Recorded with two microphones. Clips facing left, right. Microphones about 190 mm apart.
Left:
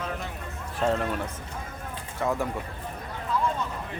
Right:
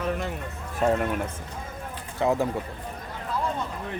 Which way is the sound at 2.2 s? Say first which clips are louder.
Right 4 dB; 25° right (ahead or behind).